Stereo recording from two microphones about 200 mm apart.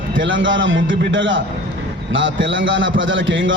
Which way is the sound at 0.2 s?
65° right (ahead or behind).